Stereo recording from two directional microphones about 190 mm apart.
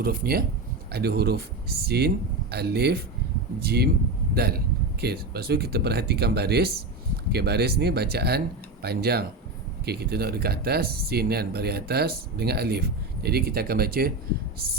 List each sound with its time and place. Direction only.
0.0 s speech: 50° right (ahead or behind)